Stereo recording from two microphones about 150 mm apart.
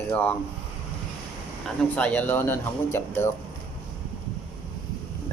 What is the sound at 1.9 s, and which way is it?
Speech, 10° left (ahead or behind).